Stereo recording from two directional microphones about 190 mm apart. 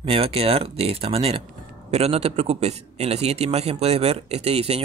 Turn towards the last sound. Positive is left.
turn(degrees=-30)  # may be behind; listen again after turning